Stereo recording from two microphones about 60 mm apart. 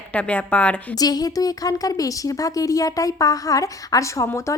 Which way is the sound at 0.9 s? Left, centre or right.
Left.